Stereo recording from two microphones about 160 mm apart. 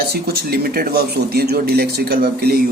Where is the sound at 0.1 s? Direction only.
75° right (ahead or behind).